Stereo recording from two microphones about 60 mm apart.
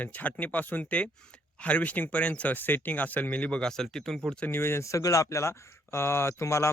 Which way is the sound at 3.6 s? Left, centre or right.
Centre.